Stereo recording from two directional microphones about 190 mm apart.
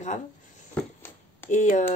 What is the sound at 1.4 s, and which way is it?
Speech, 40° left (ahead or behind).